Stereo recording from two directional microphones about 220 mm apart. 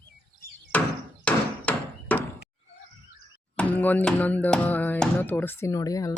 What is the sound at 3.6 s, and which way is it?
Music, 5° left (ahead or behind).